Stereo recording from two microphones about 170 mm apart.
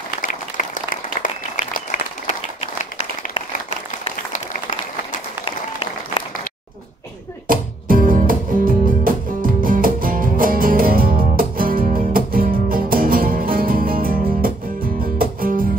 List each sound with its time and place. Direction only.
0.2 s applause: 50° left (ahead or behind)
4.0 s a sound: 50° left (ahead or behind)
5.4 s applause: 30° left (ahead or behind)
7.4 s music: 55° right (ahead or behind)